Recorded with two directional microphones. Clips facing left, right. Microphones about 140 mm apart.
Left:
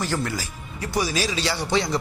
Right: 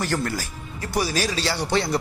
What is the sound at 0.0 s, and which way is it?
Speech, 55° right (ahead or behind).